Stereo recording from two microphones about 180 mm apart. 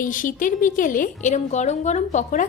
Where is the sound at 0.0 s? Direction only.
45° left (ahead or behind).